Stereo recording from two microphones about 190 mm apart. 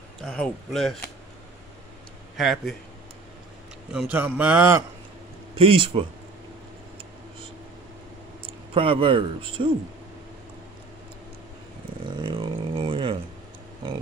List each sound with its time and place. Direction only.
0.2 s speech: 5° left (ahead or behind)
2.3 s a man's voice: centre (ahead or behind)
4.1 s speech: 10° right (ahead or behind)
5.6 s a man's voice: 25° right (ahead or behind)
8.7 s a man's voice: 25° right (ahead or behind)
12.2 s a sound: 25° right (ahead or behind)